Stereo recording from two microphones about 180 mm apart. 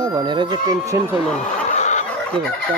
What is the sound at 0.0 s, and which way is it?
Speech, 25° right (ahead or behind).